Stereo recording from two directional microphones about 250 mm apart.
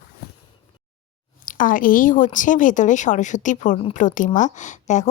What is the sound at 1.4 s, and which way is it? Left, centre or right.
A woman's voice, left.